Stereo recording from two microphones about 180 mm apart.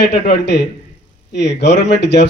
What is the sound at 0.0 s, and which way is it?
Speech, 65° left (ahead or behind).